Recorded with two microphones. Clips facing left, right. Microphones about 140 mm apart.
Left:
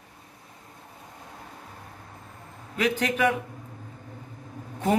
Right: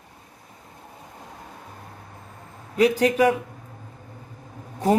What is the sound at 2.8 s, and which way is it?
Speech, 35° right (ahead or behind).